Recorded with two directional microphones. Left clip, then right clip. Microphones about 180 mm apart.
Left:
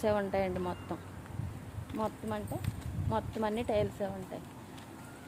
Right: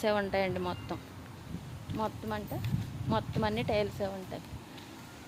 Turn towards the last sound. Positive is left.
turn(degrees=-15)  # may be behind; listen again after turning